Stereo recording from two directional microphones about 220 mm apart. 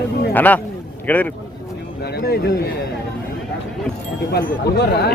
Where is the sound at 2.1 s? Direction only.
45° left (ahead or behind).